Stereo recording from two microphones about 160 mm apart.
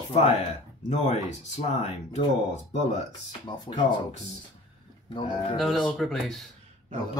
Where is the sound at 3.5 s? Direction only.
30° left (ahead or behind).